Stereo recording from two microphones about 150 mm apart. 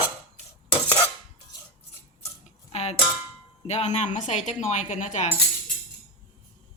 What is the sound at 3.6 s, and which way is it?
A woman's voice, 50° left (ahead or behind).